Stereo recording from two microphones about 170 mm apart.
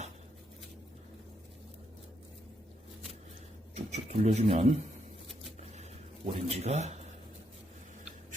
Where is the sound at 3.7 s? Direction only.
40° right (ahead or behind).